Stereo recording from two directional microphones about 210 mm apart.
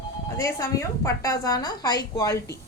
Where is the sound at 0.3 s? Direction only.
15° left (ahead or behind).